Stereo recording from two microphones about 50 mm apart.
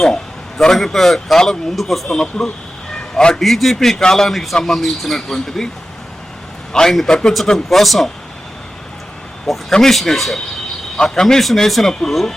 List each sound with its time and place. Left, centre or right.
0.0 s a man's voice: centre
2.9 s a sound: centre
3.4 s a man's voice: centre
6.7 s a man's voice: centre
7.4 s speech: centre
9.5 s a man's voice: centre